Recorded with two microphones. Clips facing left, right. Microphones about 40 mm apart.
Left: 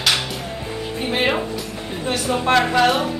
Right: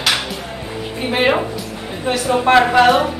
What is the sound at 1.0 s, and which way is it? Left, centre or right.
A woman's voice, centre.